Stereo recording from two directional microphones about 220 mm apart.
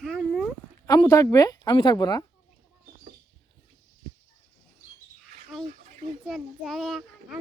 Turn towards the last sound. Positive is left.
turn(degrees=0)  # may be behind; listen again after turning